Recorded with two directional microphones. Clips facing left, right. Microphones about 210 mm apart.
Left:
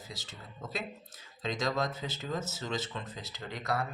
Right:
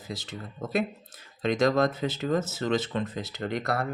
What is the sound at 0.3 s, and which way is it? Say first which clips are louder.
Speech: right 10 dB; 55° right (ahead or behind).